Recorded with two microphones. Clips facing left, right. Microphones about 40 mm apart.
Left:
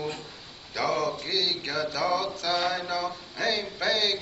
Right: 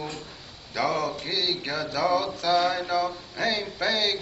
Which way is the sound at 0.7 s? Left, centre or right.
Centre.